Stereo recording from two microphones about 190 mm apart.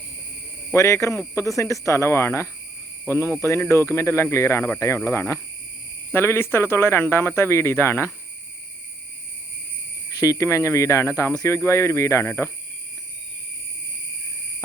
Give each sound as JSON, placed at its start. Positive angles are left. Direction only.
{"t": 0.7, "sound": "speech", "side_deg": 15}
{"t": 10.1, "sound": "speech", "side_deg": 15}